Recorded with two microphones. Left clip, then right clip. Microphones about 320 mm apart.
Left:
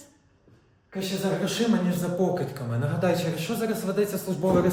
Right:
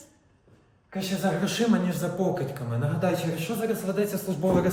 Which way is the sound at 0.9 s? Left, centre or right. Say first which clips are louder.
Even; centre.